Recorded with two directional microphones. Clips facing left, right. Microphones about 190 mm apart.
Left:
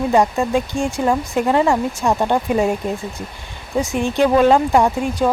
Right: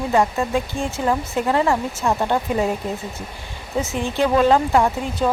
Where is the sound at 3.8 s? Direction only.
15° left (ahead or behind).